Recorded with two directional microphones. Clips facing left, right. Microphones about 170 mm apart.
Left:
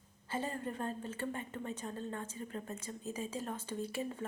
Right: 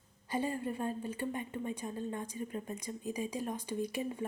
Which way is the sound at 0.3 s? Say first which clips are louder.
Right 4 dB; 10° right (ahead or behind).